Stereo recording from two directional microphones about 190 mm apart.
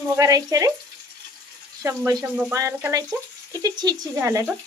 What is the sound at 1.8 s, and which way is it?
Speech, 15° right (ahead or behind).